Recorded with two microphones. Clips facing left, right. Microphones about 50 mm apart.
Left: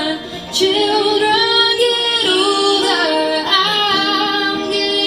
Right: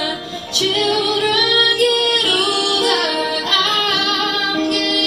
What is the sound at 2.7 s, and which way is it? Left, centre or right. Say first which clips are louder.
Music: left 1 dB; centre.